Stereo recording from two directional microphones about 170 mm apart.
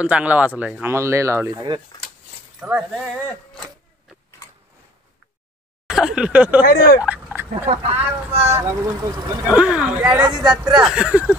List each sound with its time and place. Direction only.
0.0 s speech: 10° right (ahead or behind)
2.6 s speech: 5° right (ahead or behind)
5.9 s speech: 5° right (ahead or behind)
6.6 s speech: 60° left (ahead or behind)
7.0 s a sound: 10° right (ahead or behind)
7.6 s speech: 35° right (ahead or behind)
8.5 s speech: 15° right (ahead or behind)